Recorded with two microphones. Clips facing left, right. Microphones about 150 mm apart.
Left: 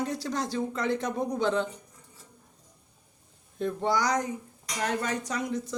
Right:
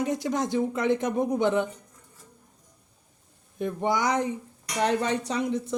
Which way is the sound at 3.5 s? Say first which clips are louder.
Right 1 dB; 15° right (ahead or behind).